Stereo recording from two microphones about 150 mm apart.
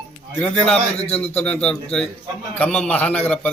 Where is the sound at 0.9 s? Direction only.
45° left (ahead or behind).